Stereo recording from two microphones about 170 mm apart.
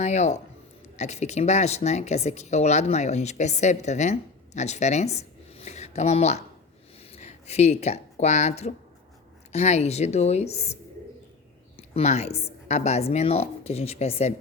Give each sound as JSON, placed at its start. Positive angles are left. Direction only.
{"t": 0.0, "sound": "speech", "side_deg": 40}
{"t": 11.9, "sound": "speech", "side_deg": 40}